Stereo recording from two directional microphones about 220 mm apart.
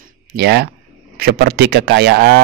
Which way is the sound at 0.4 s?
45° right (ahead or behind).